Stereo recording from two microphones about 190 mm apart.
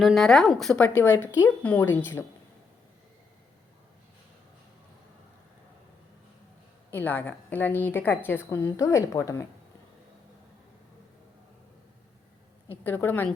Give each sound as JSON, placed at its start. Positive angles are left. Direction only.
{"t": 0.0, "sound": "speech", "side_deg": 0}
{"t": 0.9, "sound": "a woman's voice", "side_deg": 15}
{"t": 6.9, "sound": "a woman's voice", "side_deg": 10}
{"t": 12.8, "sound": "a woman's voice", "side_deg": 10}